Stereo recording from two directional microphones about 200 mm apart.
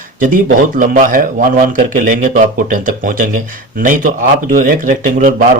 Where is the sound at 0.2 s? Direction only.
45° right (ahead or behind).